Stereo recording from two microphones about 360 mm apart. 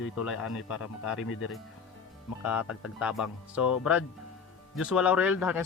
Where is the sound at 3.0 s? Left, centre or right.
Centre.